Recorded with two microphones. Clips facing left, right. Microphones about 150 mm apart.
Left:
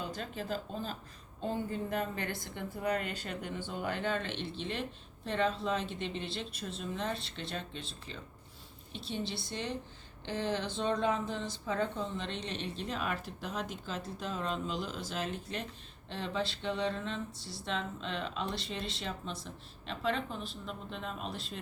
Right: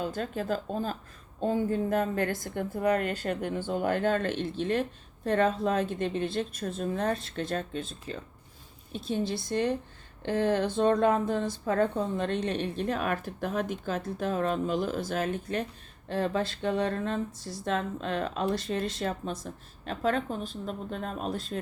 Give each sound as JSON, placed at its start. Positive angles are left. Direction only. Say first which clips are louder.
{"t": 0.0, "sound": "a woman's voice", "louder": "right 7 dB", "side_deg": -50}